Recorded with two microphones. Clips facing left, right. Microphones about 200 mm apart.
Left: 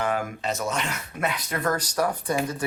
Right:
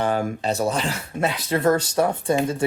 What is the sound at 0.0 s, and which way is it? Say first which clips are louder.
Speech: right 4 dB; 30° right (ahead or behind).